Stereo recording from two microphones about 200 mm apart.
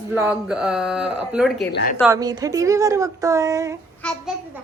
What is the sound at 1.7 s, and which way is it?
Speech, 45° left (ahead or behind).